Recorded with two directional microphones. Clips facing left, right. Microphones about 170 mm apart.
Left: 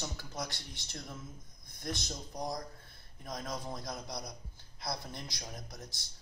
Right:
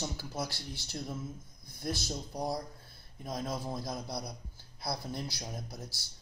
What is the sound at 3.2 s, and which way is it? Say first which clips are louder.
Speech: right 4 dB; 25° right (ahead or behind).